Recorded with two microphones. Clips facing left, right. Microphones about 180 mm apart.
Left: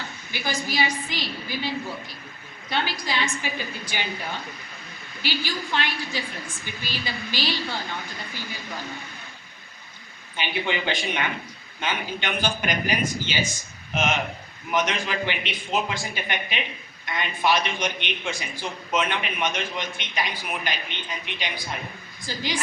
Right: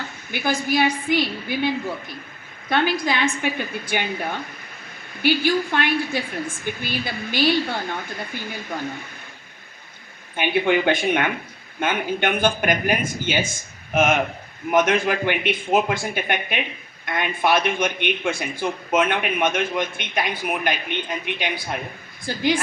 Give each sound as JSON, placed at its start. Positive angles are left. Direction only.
{"t": 0.3, "sound": "a woman's voice", "side_deg": -55}
{"t": 10.3, "sound": "a woman's voice", "side_deg": -55}